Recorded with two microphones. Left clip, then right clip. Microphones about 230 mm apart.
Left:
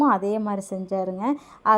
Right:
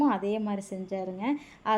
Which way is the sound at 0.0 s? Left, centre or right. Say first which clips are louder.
Left 6 dB; left.